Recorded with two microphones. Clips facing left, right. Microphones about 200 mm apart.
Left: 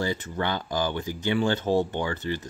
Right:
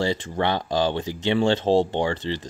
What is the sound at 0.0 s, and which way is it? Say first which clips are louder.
Speech: right 4 dB; 85° right.